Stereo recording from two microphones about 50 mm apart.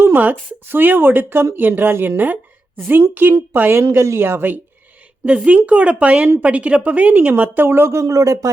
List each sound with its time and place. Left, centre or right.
0.0 s speech: right
5.5 s speech: right
7.9 s speech: right